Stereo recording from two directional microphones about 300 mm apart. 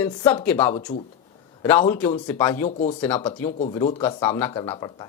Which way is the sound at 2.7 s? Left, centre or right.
Left.